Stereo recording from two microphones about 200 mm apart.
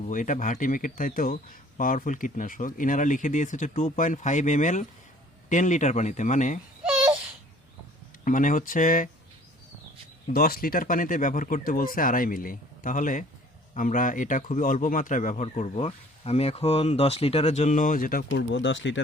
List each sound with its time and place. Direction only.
0.1 s speech: 40° left (ahead or behind)
6.8 s a sound: 5° right (ahead or behind)
8.2 s speech: 40° left (ahead or behind)
10.3 s speech: 50° left (ahead or behind)
18.3 s speech: 60° left (ahead or behind)